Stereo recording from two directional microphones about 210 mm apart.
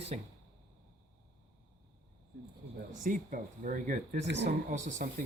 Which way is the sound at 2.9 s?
40° right (ahead or behind).